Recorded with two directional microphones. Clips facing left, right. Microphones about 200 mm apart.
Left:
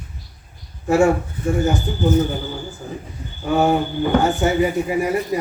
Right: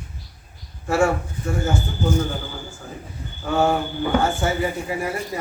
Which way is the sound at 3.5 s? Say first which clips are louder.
Left 3 dB; 15° left (ahead or behind).